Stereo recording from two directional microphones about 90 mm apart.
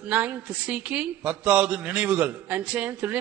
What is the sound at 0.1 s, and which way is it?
A woman's voice, 15° right (ahead or behind).